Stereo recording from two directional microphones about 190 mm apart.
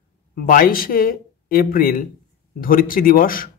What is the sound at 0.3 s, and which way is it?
Speech, 45° left (ahead or behind).